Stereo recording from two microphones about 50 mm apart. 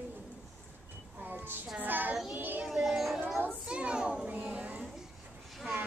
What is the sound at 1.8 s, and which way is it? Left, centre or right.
Child singing, right.